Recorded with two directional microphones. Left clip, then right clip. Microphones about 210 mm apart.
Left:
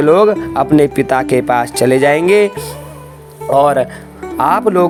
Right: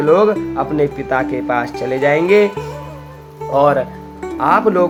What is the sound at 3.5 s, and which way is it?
Speech, 45° left (ahead or behind).